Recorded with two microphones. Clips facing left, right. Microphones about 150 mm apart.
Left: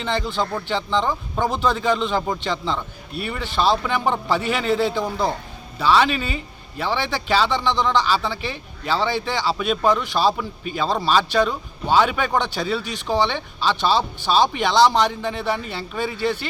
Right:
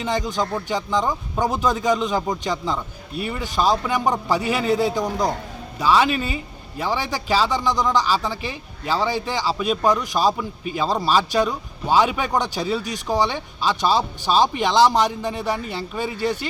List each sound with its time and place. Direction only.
0.0 s a man's voice: 15° right (ahead or behind)
5.0 s speech: 15° right (ahead or behind)